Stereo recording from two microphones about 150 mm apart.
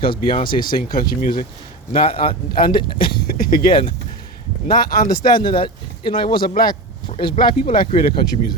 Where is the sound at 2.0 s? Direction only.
35° left (ahead or behind).